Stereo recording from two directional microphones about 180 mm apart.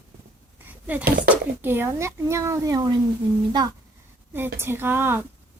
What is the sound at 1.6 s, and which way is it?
Speech, 10° right (ahead or behind).